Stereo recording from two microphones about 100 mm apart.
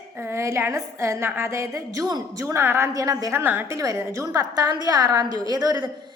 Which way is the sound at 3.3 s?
20° right (ahead or behind).